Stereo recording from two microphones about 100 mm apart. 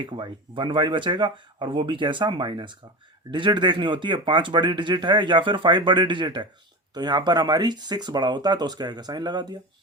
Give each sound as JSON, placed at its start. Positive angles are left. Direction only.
{"t": 0.0, "sound": "speech", "side_deg": -55}